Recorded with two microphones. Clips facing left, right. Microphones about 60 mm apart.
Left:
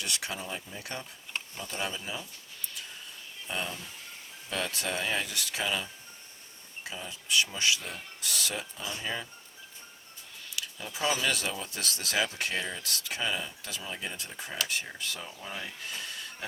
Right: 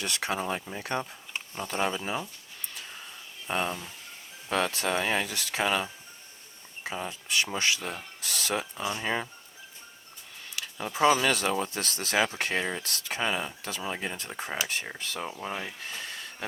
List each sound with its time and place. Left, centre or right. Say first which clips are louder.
0.0 s speech: right 6 dB; right
3.4 s speech: right 6 dB; right
10.5 s speech: right 5 dB; right
15.9 s a sound: right 1 dB; right